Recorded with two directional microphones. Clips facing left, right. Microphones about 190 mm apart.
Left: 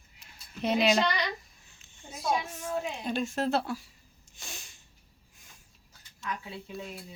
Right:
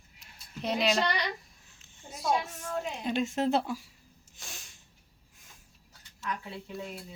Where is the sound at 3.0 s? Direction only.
20° right (ahead or behind).